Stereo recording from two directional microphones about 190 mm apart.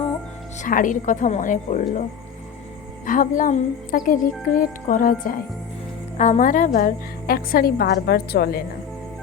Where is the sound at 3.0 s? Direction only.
45° left (ahead or behind).